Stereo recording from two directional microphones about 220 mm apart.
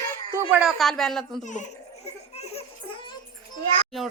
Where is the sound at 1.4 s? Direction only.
35° left (ahead or behind).